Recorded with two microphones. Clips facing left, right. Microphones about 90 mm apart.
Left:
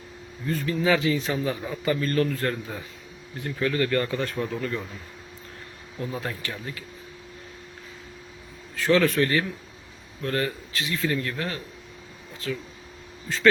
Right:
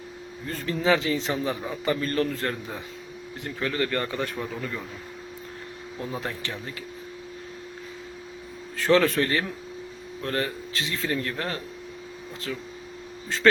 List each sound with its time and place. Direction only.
0.4 s speech: 35° right (ahead or behind); by 4.4 s 20° right (ahead or behind)
4.4 s speech: 5° right (ahead or behind)
6.0 s speech: 20° right (ahead or behind)
8.7 s speech: 35° right (ahead or behind)